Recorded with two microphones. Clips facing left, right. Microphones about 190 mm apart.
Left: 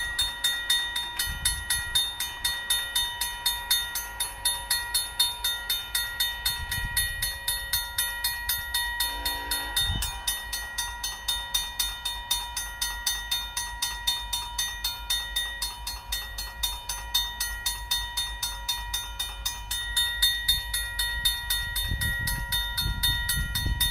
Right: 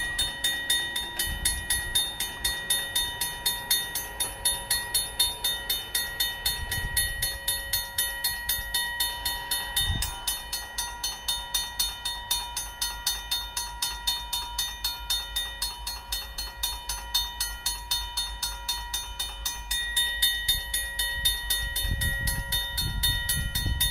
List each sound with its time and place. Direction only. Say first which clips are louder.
0.2 s train: right 3 dB; 25° right (ahead or behind)
10.2 s train: right 1 dB; centre (ahead or behind)
20.0 s train: even; 25° right (ahead or behind)